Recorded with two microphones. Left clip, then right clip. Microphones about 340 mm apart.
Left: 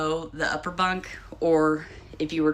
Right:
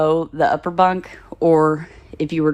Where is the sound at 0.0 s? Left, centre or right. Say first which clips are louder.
Right 10 dB; centre.